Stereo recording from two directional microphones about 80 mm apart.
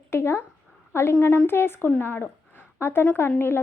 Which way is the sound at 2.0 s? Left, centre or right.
Left.